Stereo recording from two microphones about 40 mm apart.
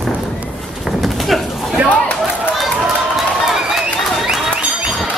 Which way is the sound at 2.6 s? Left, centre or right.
Centre.